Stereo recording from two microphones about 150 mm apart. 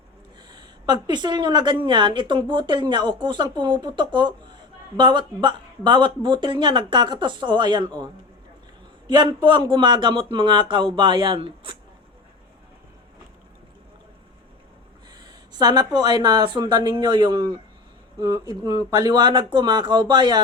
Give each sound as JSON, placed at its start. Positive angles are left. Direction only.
{"t": 0.4, "sound": "a sound", "side_deg": -30}
{"t": 1.0, "sound": "speech", "side_deg": -30}
{"t": 9.0, "sound": "speech", "side_deg": -30}
{"t": 15.1, "sound": "speech", "side_deg": -25}